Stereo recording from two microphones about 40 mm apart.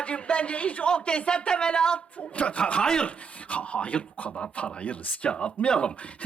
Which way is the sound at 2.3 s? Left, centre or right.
Left.